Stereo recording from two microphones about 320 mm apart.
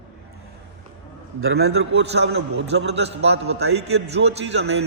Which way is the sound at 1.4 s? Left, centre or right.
Right.